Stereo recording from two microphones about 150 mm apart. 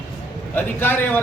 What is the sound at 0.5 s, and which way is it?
Speech, 15° left (ahead or behind).